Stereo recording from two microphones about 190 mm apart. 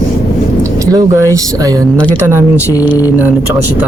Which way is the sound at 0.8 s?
15° right (ahead or behind).